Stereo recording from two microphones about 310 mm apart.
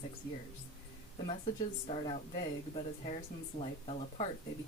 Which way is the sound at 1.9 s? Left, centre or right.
Centre.